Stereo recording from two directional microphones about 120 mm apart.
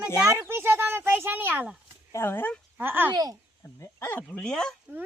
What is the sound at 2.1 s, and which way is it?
Speech, 15° left (ahead or behind).